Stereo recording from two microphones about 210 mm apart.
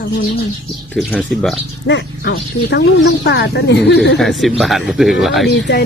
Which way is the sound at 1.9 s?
55° left (ahead or behind).